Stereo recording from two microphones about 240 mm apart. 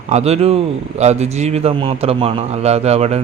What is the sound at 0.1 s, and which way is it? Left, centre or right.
A man's voice, right.